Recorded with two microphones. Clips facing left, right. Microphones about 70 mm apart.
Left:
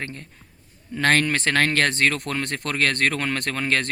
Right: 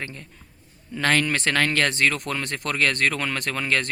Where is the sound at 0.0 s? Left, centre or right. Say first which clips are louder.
Left 1 dB; left.